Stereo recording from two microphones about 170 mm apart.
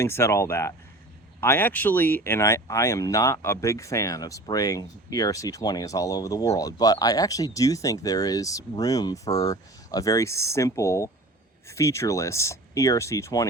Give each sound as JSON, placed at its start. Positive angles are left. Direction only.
{"t": 0.0, "sound": "speech", "side_deg": 15}